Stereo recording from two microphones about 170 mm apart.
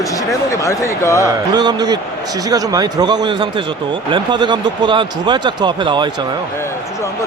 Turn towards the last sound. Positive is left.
turn(degrees=-25)  # may be behind; listen again after turning